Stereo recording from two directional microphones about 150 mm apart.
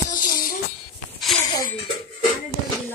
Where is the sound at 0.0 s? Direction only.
70° left (ahead or behind).